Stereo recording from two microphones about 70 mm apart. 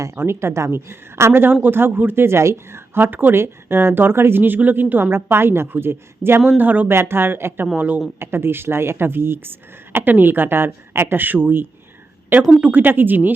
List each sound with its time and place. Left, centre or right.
0.2 s a woman's voice: right